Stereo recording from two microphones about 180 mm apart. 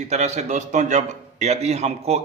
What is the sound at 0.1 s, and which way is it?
A man's voice, 40° right (ahead or behind).